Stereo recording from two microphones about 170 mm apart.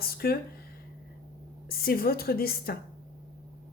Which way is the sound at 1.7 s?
60° left (ahead or behind).